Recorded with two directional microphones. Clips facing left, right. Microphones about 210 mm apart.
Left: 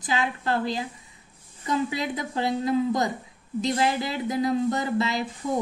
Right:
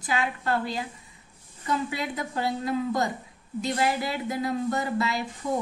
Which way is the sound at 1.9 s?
20° left (ahead or behind).